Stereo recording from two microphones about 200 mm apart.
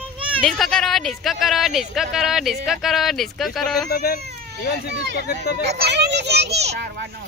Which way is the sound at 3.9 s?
50° left (ahead or behind).